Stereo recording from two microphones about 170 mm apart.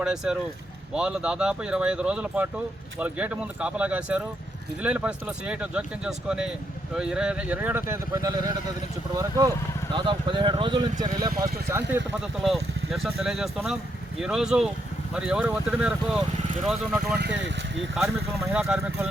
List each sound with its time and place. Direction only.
0.0 s speech: 5° right (ahead or behind); by 8.5 s 20° right (ahead or behind)
9.9 s speech: 25° right (ahead or behind)
11.7 s speech: 15° right (ahead or behind)
17.2 s speech: 90° right
17.9 s speech: 5° right (ahead or behind)